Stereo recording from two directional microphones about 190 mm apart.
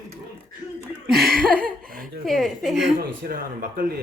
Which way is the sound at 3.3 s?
50° right (ahead or behind).